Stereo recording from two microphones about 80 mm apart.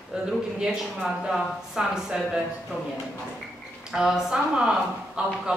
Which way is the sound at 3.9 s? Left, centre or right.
Centre.